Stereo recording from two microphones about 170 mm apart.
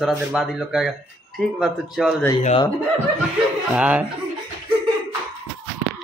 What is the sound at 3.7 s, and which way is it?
Speech, 5° right (ahead or behind).